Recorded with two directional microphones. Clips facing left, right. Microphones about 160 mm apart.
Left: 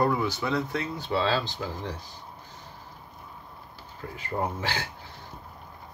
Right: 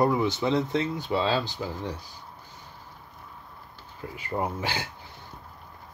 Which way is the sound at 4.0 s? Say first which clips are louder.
Even; 10° right (ahead or behind).